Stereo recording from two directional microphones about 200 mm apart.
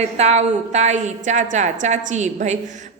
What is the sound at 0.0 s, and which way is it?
A woman's voice, 35° right (ahead or behind).